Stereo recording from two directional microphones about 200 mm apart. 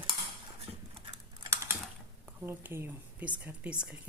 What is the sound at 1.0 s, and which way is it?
Computer keyboard, 25° right (ahead or behind).